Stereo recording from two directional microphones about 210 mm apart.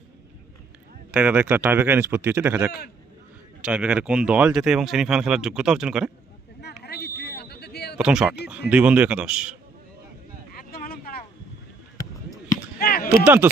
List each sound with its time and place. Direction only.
1.1 s speech: 5° right (ahead or behind)
6.6 s a sound: 50° left (ahead or behind)
7.9 s speech: 5° right (ahead or behind)
10.5 s vehicle: 45° left (ahead or behind)
12.8 s a sound: 45° left (ahead or behind)
13.2 s speech: 10° right (ahead or behind)